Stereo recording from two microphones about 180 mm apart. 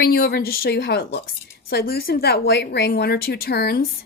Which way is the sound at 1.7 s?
60° left (ahead or behind).